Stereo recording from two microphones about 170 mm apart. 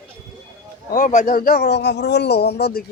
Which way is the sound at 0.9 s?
50° left (ahead or behind).